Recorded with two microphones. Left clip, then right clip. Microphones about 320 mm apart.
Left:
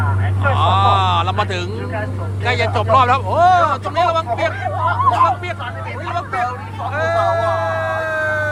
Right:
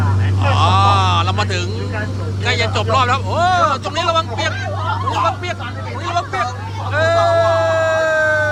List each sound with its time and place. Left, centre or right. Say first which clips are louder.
0.5 s a sound: right 1 dB; centre
2.4 s speech: even; centre
6.9 s sheep: right 3 dB; centre